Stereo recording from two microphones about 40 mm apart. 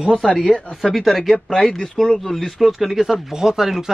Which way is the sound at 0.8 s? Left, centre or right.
Centre.